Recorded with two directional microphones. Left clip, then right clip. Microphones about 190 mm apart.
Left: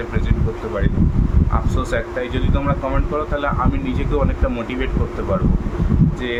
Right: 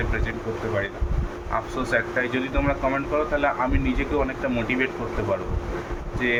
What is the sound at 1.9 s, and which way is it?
Speech, 20° left (ahead or behind).